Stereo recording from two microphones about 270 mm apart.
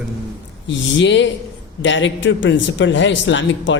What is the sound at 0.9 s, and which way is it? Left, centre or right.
A man's voice, left.